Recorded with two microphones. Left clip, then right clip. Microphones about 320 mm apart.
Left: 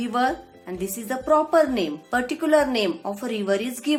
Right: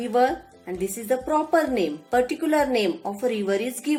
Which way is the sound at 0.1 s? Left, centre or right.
Centre.